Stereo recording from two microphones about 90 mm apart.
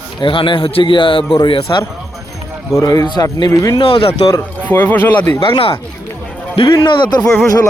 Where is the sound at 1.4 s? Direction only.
65° left (ahead or behind).